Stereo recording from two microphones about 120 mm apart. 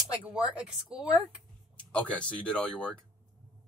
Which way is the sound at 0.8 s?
5° right (ahead or behind).